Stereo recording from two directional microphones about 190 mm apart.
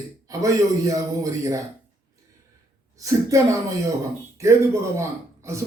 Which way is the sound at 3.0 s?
15° right (ahead or behind).